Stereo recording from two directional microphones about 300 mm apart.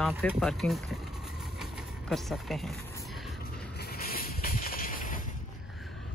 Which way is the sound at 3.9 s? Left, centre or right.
Left.